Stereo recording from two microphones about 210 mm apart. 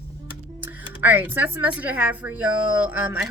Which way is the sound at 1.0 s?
10° right (ahead or behind).